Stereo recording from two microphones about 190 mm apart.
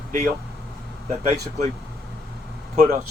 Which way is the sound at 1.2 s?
35° right (ahead or behind).